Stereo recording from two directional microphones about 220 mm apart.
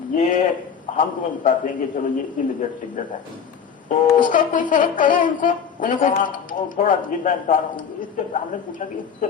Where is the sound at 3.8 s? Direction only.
35° left (ahead or behind).